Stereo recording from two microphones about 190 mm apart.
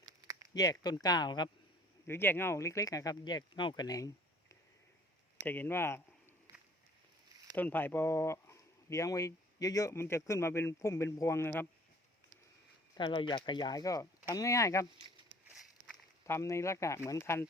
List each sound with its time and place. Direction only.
0.5 s speech: 20° left (ahead or behind)
2.0 s speech: 10° left (ahead or behind)
6.5 s a sound: 20° right (ahead or behind)
7.5 s speech: 10° left (ahead or behind)
13.0 s speech: 25° left (ahead or behind)
16.2 s speech: 15° left (ahead or behind)